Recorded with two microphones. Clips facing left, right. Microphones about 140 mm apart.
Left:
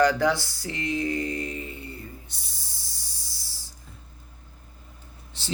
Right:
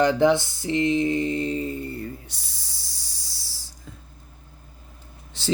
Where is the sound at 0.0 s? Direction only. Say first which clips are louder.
Right 3 dB; 20° right (ahead or behind).